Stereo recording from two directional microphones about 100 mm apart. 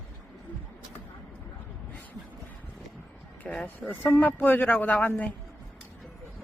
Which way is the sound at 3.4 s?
15° left (ahead or behind).